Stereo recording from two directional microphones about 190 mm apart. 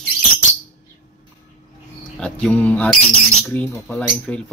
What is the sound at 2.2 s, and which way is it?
Speech, 5° left (ahead or behind).